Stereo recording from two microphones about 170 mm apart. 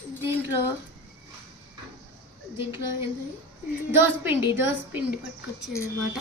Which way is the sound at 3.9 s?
10° right (ahead or behind).